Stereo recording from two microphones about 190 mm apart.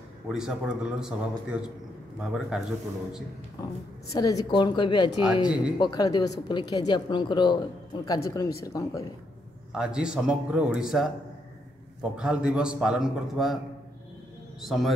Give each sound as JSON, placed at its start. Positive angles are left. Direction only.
{"t": 0.3, "sound": "a man's voice", "side_deg": -5}
{"t": 4.1, "sound": "a woman's voice", "side_deg": 20}
{"t": 9.7, "sound": "a man's voice", "side_deg": -5}
{"t": 14.6, "sound": "a man's voice", "side_deg": 0}